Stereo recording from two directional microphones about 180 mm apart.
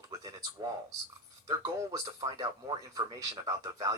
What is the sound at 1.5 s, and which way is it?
Speech, 20° right (ahead or behind).